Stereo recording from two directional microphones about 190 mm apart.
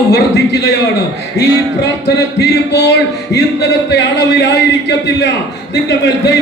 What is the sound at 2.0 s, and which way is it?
Speech, 60° left (ahead or behind).